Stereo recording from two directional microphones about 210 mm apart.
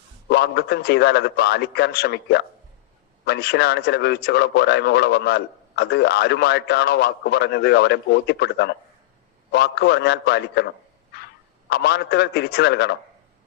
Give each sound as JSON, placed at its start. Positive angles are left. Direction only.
{"t": 0.3, "sound": "a man's voice", "side_deg": 50}
{"t": 11.7, "sound": "a man's voice", "side_deg": 50}